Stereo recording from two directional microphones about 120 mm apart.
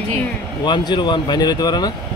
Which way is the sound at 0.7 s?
40° left (ahead or behind).